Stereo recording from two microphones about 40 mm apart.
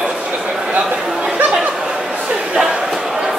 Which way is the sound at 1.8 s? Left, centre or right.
Centre.